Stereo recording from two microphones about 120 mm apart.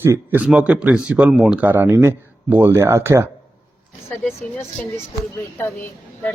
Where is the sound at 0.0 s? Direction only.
15° right (ahead or behind).